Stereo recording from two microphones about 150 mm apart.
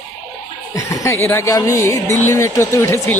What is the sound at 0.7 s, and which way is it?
Speech, 20° left (ahead or behind).